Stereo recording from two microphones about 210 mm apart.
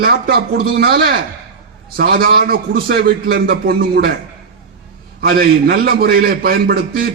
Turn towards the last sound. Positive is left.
turn(degrees=-45)  # may be behind; listen again after turning